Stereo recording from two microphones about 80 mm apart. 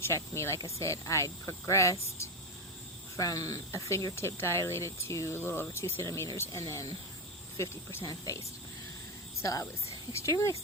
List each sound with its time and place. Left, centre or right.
0.0 s speech: left
8.1 s speech: left
9.4 s speech: left